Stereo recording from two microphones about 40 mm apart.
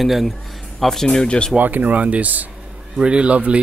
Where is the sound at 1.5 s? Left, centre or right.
Right.